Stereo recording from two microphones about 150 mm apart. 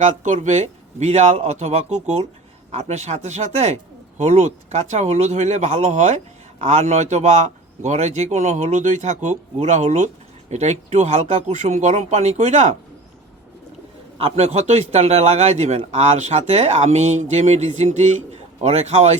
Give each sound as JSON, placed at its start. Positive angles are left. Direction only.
{"t": 0.0, "sound": "a man's voice", "side_deg": -55}
{"t": 14.2, "sound": "a man's voice", "side_deg": -45}